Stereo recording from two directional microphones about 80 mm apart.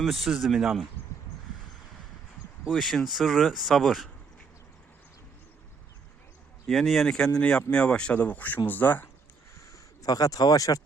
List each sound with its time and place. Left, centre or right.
0.0 s speech: centre
2.6 s speech: centre
6.7 s speech: centre; by 9.0 s left
9.6 s bird: left